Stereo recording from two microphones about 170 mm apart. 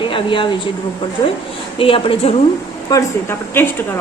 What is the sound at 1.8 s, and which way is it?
Speech, 30° left (ahead or behind).